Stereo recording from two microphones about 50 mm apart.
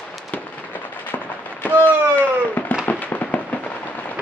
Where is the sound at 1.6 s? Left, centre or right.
Left.